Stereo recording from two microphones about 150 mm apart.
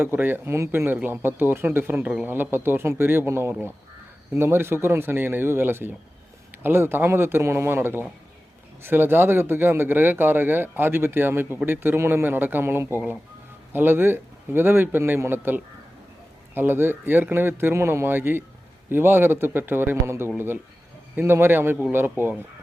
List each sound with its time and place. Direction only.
0.0 s speech: 15° right (ahead or behind)